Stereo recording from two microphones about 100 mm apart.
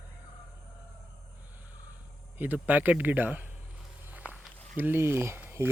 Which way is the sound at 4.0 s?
15° right (ahead or behind).